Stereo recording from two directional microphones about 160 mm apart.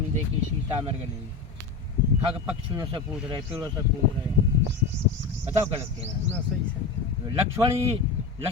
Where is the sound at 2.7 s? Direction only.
30° right (ahead or behind).